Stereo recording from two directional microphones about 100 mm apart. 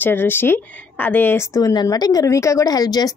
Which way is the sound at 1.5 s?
40° left (ahead or behind).